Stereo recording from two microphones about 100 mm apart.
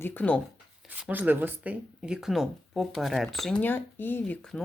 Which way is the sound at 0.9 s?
15° right (ahead or behind).